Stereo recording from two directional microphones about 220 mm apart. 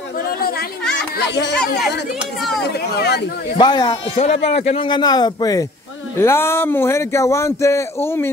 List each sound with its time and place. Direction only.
0.4 s chatter: 45° left (ahead or behind)
1.1 s speech: 50° left (ahead or behind)
1.8 s speech: centre (ahead or behind)
3.0 s speech: 50° left (ahead or behind)
3.5 s speech: 20° left (ahead or behind)